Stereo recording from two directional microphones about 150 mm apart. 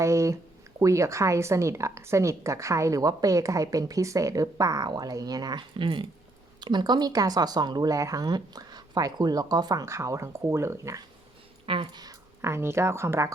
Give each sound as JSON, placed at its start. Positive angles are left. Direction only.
{"t": 0.0, "sound": "a woman's voice", "side_deg": -20}
{"t": 11.6, "sound": "speech", "side_deg": -35}